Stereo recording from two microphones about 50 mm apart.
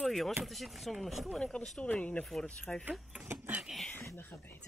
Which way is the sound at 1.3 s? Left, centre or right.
Centre.